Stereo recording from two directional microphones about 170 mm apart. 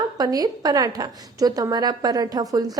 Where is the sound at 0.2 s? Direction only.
25° right (ahead or behind).